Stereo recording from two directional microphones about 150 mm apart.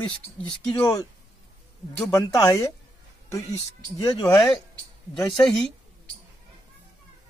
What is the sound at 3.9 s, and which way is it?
Speech, 25° left (ahead or behind).